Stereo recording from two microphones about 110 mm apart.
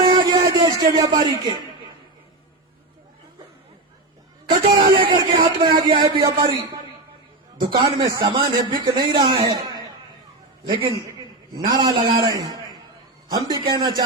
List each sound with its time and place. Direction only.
0.1 s a sound: 40° right (ahead or behind)
4.6 s speech: 50° right (ahead or behind)
7.6 s a man's voice: 45° right (ahead or behind)
10.7 s speech: 50° right (ahead or behind)
11.5 s a man's voice: 35° right (ahead or behind)